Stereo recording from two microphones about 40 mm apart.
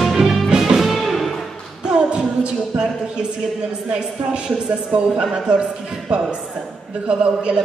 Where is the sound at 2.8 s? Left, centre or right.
Centre.